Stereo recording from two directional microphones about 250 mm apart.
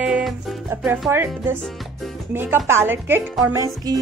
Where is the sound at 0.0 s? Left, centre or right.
Centre.